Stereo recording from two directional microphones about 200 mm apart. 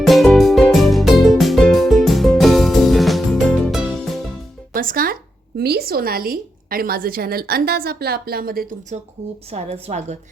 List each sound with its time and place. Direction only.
0.0 s music: centre (ahead or behind)
4.7 s music: 45° right (ahead or behind)
5.5 s a woman's voice: 50° right (ahead or behind)
9.5 s a woman's voice: 30° right (ahead or behind)